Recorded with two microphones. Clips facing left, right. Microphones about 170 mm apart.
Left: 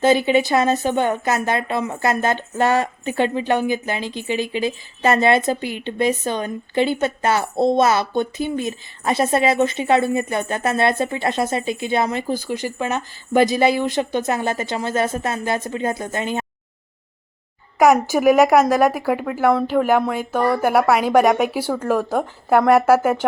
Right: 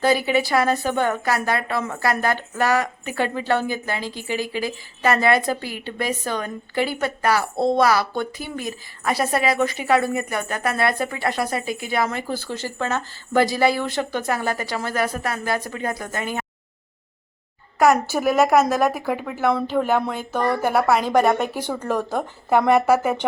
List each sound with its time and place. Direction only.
0.0 s a woman's voice: 20° left (ahead or behind)
18.0 s speech: 15° left (ahead or behind)